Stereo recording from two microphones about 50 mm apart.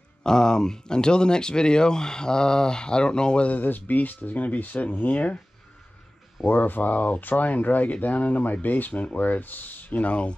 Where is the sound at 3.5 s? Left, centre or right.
Left.